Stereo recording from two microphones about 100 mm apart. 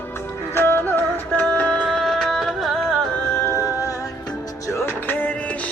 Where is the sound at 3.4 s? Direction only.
30° right (ahead or behind).